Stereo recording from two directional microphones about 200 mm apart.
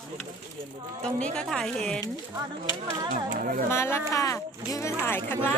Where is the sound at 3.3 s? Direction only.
45° right (ahead or behind).